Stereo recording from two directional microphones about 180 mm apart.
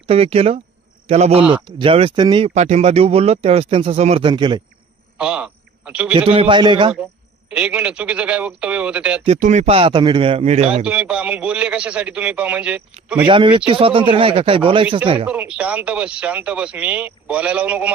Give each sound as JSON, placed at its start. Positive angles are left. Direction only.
{"t": 0.1, "sound": "speech", "side_deg": -35}
{"t": 5.1, "sound": "a man's voice", "side_deg": -5}
{"t": 6.1, "sound": "speech", "side_deg": -30}
{"t": 7.5, "sound": "speech", "side_deg": -5}
{"t": 9.2, "sound": "speech", "side_deg": -40}
{"t": 10.8, "sound": "speech", "side_deg": -5}
{"t": 13.2, "sound": "speech", "side_deg": -30}
{"t": 15.3, "sound": "speech", "side_deg": -5}